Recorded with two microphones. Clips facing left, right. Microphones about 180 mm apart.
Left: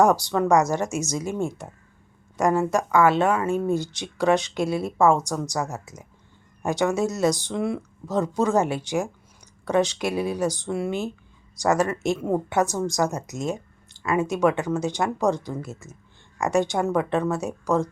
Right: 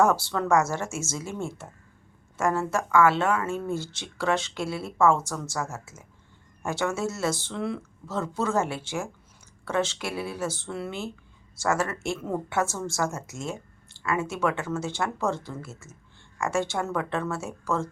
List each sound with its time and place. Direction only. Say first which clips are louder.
0.0 s speech: left 4 dB; 15° left (ahead or behind)